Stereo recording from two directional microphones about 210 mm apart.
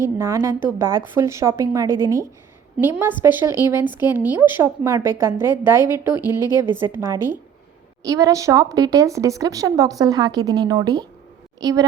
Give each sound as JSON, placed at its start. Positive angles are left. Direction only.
{"t": 0.2, "sound": "a woman's voice", "side_deg": -15}